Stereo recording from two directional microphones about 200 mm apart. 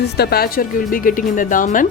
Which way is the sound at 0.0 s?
50° left (ahead or behind).